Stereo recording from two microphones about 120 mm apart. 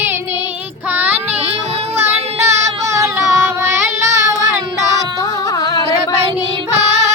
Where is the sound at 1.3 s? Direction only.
60° right (ahead or behind).